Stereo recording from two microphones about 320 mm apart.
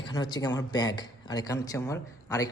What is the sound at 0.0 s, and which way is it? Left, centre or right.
A man's voice, centre.